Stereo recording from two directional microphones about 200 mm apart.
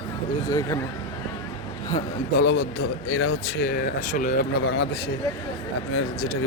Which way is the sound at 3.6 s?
45° left (ahead or behind).